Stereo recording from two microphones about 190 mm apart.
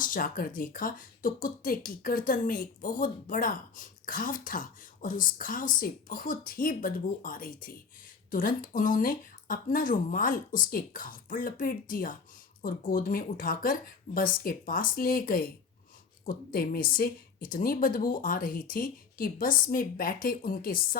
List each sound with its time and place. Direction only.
0.0 s speech: 50° left (ahead or behind)